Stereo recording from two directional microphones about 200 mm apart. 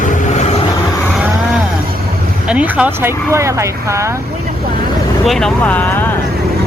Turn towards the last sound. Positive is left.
turn(degrees=10)  # may be behind; listen again after turning